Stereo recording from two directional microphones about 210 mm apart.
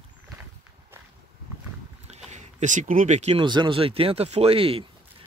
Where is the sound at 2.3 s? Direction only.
35° right (ahead or behind).